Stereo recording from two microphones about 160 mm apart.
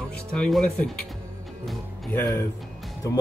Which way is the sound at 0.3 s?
5° left (ahead or behind).